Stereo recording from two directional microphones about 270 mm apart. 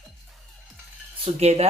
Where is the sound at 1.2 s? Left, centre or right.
Right.